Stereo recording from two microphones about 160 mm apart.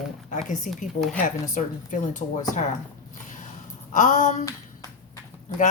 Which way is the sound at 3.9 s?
55° left (ahead or behind).